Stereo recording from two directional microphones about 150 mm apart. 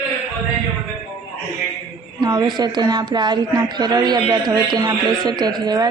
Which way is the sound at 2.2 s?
25° right (ahead or behind).